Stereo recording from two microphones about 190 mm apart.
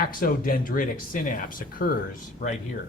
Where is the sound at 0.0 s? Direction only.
50° left (ahead or behind).